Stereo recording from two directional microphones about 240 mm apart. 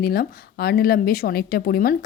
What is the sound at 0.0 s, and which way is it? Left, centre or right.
A woman's voice, left.